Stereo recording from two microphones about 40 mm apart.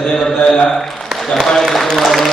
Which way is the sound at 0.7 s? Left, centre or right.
Centre.